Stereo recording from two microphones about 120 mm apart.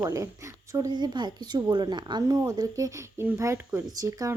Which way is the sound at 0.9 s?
40° right (ahead or behind).